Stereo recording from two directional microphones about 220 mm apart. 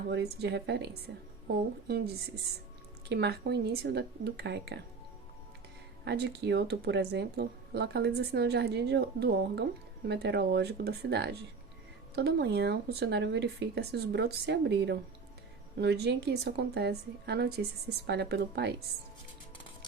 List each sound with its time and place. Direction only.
0.1 s speech: 50° right (ahead or behind)
3.1 s speech: 50° right (ahead or behind)
6.1 s speech: 50° right (ahead or behind)